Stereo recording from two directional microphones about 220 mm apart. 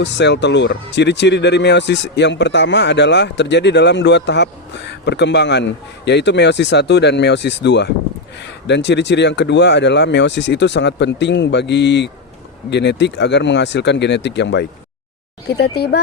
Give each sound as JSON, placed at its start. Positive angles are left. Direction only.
{"t": 0.0, "sound": "speech", "side_deg": 50}